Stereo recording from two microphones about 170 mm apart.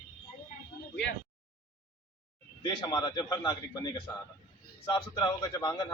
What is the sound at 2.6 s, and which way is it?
Speech, 25° left (ahead or behind).